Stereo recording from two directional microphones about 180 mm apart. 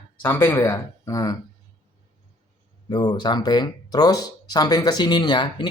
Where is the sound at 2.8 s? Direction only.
25° left (ahead or behind).